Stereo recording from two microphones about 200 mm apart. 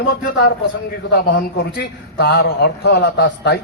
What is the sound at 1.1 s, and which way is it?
A man's voice, 50° left (ahead or behind).